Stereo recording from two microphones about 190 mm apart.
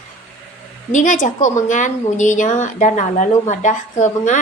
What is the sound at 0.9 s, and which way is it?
Speech, 45° left (ahead or behind).